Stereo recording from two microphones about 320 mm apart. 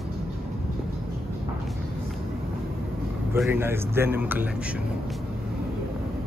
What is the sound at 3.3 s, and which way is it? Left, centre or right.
Speech, centre.